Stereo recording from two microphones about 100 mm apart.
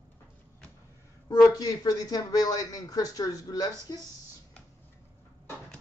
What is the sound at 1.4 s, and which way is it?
Speech, 40° left (ahead or behind).